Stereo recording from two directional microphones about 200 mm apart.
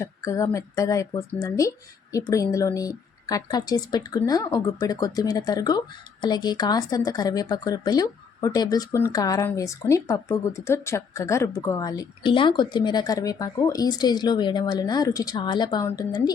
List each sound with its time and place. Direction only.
0.0 s speech: 15° left (ahead or behind)